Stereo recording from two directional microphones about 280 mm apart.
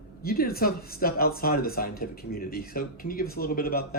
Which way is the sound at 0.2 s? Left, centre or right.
Left.